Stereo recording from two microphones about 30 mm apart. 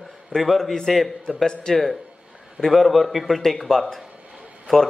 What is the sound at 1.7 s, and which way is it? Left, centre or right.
Speech, left.